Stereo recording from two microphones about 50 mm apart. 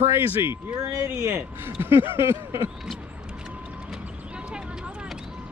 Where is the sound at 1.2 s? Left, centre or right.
Right.